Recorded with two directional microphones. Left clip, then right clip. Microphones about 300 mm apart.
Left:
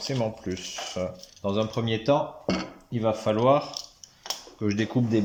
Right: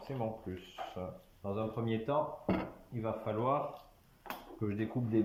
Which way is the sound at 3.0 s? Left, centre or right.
Left.